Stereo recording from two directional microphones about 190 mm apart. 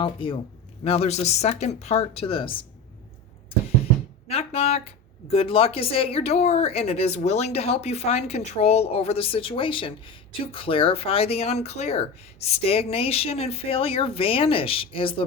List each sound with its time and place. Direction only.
0.0 s speech: 25° left (ahead or behind)
4.3 s speech: 35° left (ahead or behind)